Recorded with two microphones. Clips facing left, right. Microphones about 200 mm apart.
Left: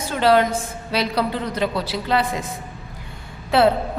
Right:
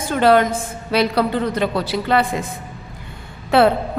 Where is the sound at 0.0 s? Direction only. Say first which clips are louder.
Right 3 dB; 50° right (ahead or behind).